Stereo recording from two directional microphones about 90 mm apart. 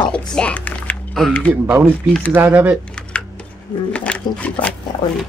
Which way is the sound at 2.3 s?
20° right (ahead or behind).